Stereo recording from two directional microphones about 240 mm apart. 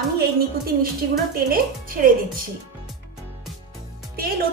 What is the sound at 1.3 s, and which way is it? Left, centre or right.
A woman's voice, right.